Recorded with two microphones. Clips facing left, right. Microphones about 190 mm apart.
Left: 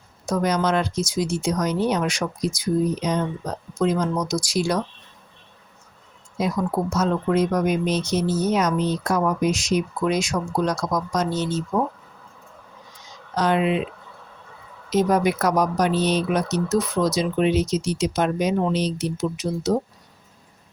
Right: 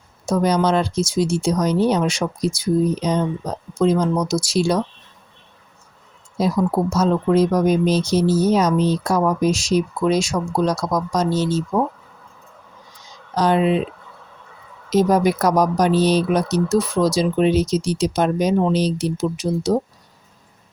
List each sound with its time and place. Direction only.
0.3 s speech: 30° right (ahead or behind)
6.3 s speech: 30° right (ahead or behind)
13.3 s speech: 35° right (ahead or behind)
14.8 s speech: 35° right (ahead or behind)